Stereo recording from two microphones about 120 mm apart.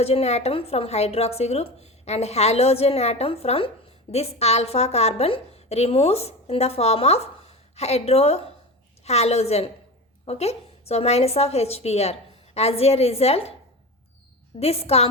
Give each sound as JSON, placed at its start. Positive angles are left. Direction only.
{"t": 0.0, "sound": "a woman's voice", "side_deg": 60}
{"t": 14.6, "sound": "a woman's voice", "side_deg": 60}